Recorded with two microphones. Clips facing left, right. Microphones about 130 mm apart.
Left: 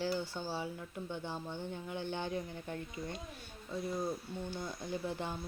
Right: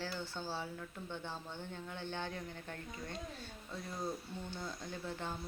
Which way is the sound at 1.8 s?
10° left (ahead or behind).